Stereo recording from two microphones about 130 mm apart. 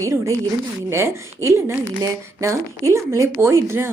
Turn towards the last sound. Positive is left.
turn(degrees=-20)  # may be behind; listen again after turning